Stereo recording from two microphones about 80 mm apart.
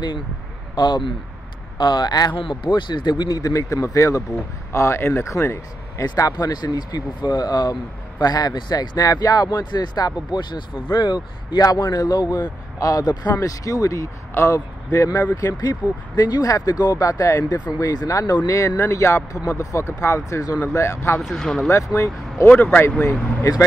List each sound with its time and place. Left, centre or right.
0.7 s speech: left
1.8 s a man's voice: left
6.3 s a man's voice: left
11.5 s a man's voice: left
13.4 s speech: left
15.5 s speech: left
18.2 s a man's voice: left
18.8 s speech: left
21.2 s speech: centre
21.9 s speech: left
22.5 s speech: left